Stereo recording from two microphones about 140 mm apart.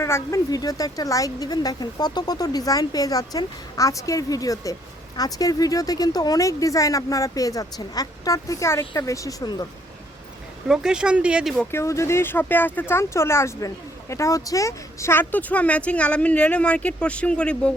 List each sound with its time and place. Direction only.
0.0 s speech: 20° left (ahead or behind)
10.7 s speech: 5° right (ahead or behind)
11.7 s speech: 20° left (ahead or behind)